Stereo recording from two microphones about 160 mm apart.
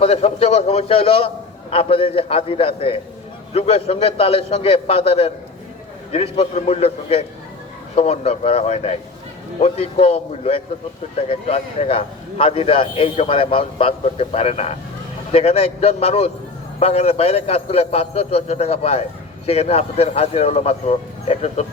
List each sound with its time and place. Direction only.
0.0 s a man's voice: 40° left (ahead or behind)